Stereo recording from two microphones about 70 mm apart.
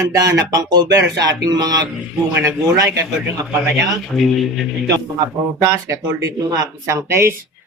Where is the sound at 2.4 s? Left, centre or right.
Right.